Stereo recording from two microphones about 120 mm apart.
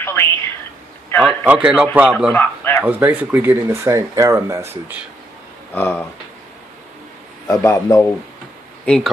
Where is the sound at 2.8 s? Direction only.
15° right (ahead or behind).